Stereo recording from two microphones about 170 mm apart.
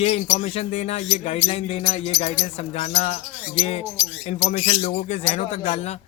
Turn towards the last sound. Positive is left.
turn(degrees=40)  # may be behind; listen again after turning